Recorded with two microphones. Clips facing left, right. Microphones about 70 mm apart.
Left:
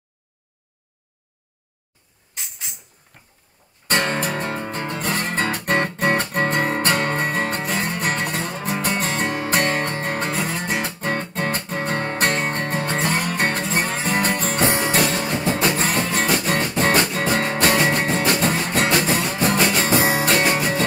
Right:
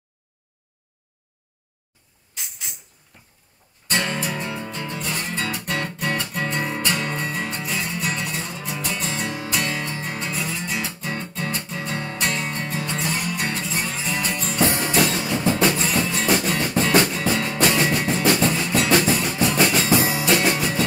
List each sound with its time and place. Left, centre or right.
3.8 s music: left
20.4 s music: left